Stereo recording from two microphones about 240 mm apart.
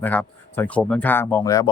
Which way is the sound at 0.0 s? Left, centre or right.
Centre.